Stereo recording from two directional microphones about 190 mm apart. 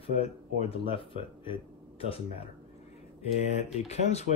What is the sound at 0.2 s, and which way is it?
Speech, 30° left (ahead or behind).